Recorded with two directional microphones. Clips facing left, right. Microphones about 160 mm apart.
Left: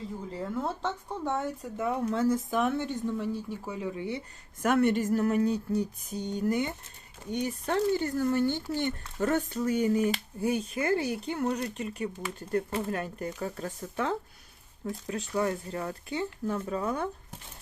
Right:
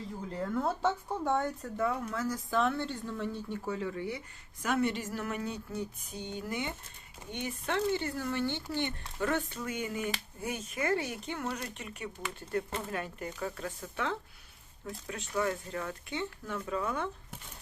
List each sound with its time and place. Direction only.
0.3 s speech: 5° left (ahead or behind)
0.8 s speech: 10° right (ahead or behind)
1.6 s speech: 20° left (ahead or behind)
4.6 s speech: 55° left (ahead or behind); by 17.1 s 40° left (ahead or behind)